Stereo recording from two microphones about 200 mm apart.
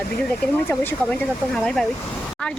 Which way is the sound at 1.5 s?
Centre (ahead or behind).